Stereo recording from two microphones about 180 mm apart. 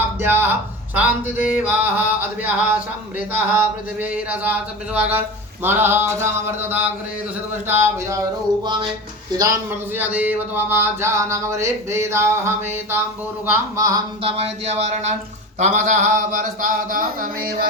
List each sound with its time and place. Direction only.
0.2 s speech: 10° right (ahead or behind)
8.6 s music: 25° right (ahead or behind)
9.3 s speech: 15° right (ahead or behind)
14.2 s speech: 30° right (ahead or behind); by 17.5 s 50° right (ahead or behind)